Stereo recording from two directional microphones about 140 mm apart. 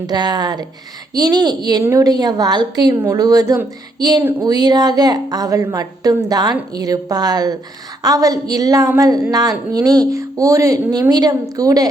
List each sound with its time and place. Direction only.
0.1 s speech: 30° right (ahead or behind)
2.9 s speech: 15° right (ahead or behind)
3.2 s speech: 25° right (ahead or behind)
4.2 s speech: 15° right (ahead or behind)
4.4 s speech: 30° right (ahead or behind)